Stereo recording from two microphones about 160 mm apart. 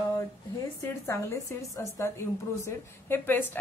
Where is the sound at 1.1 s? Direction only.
20° left (ahead or behind).